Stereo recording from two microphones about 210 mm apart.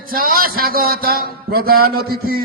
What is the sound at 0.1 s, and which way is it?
A man's voice, 45° right (ahead or behind).